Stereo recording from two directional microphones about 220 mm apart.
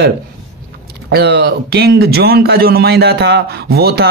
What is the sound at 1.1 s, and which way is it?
A man's voice, 45° right (ahead or behind).